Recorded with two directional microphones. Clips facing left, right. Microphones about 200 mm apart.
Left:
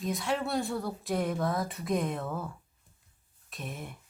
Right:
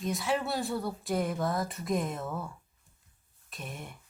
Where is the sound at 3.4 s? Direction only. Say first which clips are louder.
Left 2 dB; centre (ahead or behind).